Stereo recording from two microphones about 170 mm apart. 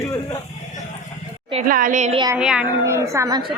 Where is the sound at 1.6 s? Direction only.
55° right (ahead or behind).